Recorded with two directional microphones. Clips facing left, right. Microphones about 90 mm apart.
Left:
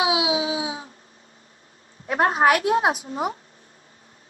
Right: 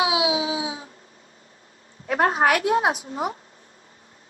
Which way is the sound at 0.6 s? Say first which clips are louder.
Left 1 dB; 35° left (ahead or behind).